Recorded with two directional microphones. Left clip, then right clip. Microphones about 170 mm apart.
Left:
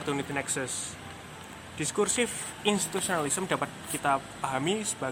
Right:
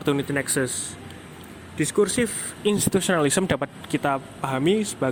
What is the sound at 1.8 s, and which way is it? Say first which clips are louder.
Speech: right 6 dB; 15° right (ahead or behind).